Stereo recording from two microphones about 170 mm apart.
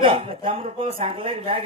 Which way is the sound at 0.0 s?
30° right (ahead or behind).